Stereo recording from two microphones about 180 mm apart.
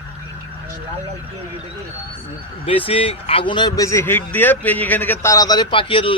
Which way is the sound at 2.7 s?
30° left (ahead or behind).